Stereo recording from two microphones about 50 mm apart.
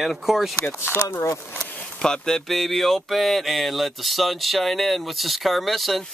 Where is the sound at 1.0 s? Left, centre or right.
Left.